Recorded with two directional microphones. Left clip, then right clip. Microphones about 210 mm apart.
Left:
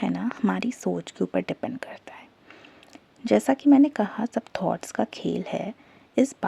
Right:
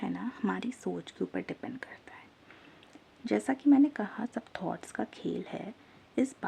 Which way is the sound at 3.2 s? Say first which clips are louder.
Left 8 dB; 35° left (ahead or behind).